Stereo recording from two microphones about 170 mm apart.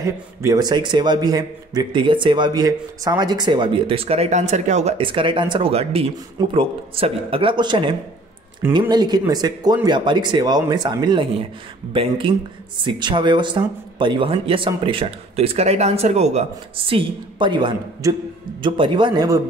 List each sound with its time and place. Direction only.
0.0 s a man's voice: 20° right (ahead or behind)